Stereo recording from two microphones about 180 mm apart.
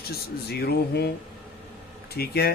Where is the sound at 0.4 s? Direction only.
60° left (ahead or behind).